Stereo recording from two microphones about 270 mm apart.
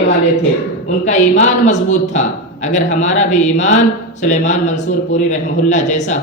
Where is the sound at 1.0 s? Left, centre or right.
Left.